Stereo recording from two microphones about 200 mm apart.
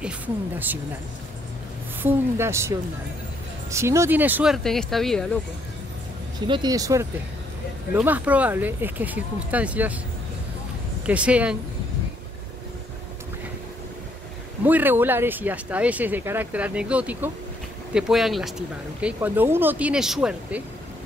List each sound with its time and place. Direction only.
2.0 s speech: 10° right (ahead or behind)
6.4 s speech: 20° right (ahead or behind)
11.1 s speech: 5° right (ahead or behind)
14.6 s speech: 10° right (ahead or behind)